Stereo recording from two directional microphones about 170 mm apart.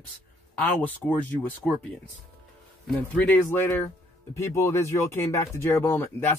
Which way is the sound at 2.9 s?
10° left (ahead or behind).